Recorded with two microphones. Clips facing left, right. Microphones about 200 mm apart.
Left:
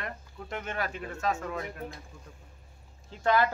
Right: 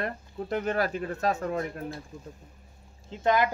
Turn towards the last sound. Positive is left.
turn(degrees=-15)  # may be behind; listen again after turning